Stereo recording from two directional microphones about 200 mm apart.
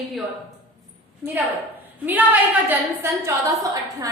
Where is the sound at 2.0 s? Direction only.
10° right (ahead or behind).